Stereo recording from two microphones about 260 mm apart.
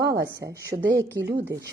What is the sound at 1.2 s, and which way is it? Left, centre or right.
Speech, right.